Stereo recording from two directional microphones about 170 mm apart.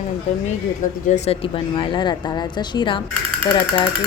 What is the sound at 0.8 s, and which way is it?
Speech, 45° left (ahead or behind).